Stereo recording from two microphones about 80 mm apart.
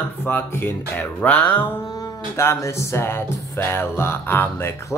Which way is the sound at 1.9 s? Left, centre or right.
Left.